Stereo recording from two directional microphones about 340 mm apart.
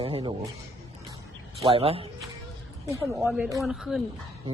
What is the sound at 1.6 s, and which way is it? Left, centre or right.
Speech, centre.